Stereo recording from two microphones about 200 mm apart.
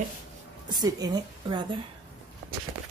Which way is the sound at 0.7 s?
20° right (ahead or behind).